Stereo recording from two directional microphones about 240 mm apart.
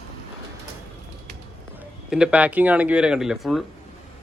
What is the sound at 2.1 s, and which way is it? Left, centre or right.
Speech, centre.